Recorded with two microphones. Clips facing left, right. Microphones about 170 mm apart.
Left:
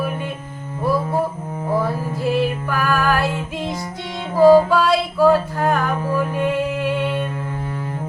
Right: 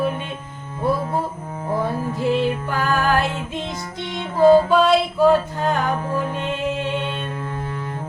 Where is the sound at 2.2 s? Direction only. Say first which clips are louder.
Even; 20° right (ahead or behind).